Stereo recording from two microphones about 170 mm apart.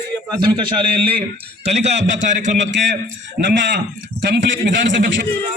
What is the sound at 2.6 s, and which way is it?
A man's voice, 90° right.